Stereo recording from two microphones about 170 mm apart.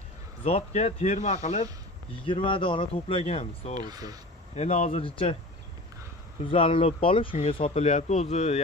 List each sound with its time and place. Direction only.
0.4 s speech: 40° left (ahead or behind)
2.2 s speech: 30° left (ahead or behind)
3.8 s speech: 20° right (ahead or behind)
4.6 s speech: 45° left (ahead or behind)
6.4 s speech: 30° left (ahead or behind)